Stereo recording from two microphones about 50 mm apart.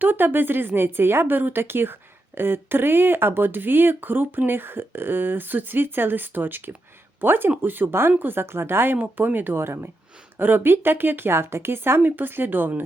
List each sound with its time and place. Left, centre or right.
0.0 s speech: right
9.0 s speech: right